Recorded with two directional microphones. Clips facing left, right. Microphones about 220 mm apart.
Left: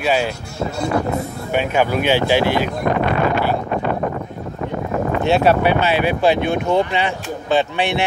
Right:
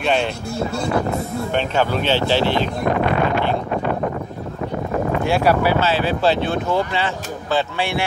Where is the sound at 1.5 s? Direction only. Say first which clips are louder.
Left 3 dB; 10° left (ahead or behind).